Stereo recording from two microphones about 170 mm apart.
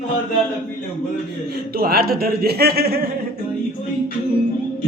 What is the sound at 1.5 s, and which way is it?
A man's voice, 65° right (ahead or behind).